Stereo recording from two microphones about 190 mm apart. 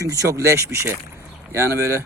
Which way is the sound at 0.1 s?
15° right (ahead or behind).